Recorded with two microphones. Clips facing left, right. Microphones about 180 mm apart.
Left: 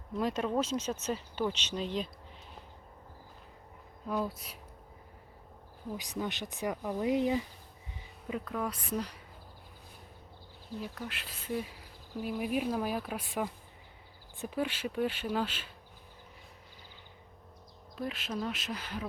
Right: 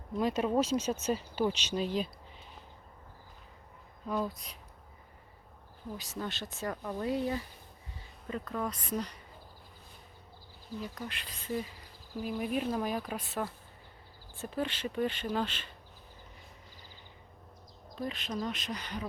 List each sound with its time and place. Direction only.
0.2 s speech: 5° right (ahead or behind)
4.1 s speech: 5° left (ahead or behind)
6.0 s speech: 15° left (ahead or behind)
8.3 s speech: 5° left (ahead or behind)
10.8 s speech: 5° left (ahead or behind)
17.9 s speech: 5° left (ahead or behind)